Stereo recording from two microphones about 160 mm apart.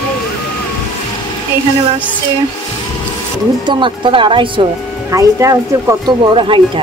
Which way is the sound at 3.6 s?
30° right (ahead or behind).